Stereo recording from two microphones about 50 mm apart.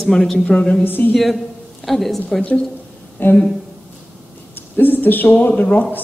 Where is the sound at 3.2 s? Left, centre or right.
Left.